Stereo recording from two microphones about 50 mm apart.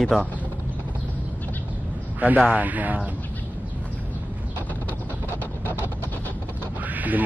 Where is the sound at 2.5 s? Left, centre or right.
Right.